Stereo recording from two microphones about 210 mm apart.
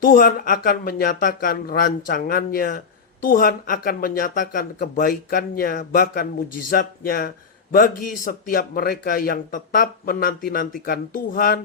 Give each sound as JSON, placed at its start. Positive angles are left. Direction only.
{"t": 0.0, "sound": "speech", "side_deg": 40}